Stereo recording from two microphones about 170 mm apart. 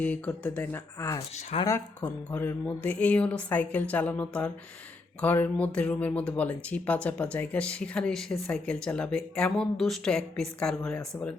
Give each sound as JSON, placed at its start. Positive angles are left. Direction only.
{"t": 0.0, "sound": "speech", "side_deg": 10}